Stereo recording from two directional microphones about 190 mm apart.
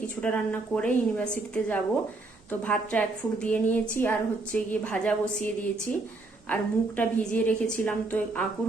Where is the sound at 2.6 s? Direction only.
10° left (ahead or behind).